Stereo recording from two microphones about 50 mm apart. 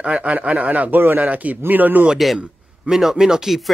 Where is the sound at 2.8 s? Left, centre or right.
Centre.